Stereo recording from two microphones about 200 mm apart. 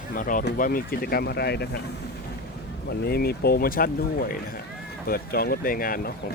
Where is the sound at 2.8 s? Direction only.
50° left (ahead or behind).